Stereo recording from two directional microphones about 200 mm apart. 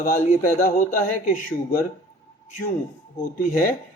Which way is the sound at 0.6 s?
45° left (ahead or behind).